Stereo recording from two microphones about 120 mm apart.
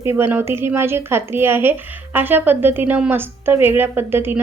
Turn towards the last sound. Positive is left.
turn(degrees=-20)  # may be behind; listen again after turning